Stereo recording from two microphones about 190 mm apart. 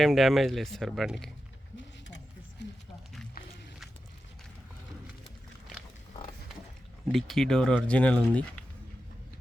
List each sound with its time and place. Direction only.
0.0 s speech: centre (ahead or behind)
2.6 s a sound: 65° left (ahead or behind)
7.1 s speech: centre (ahead or behind)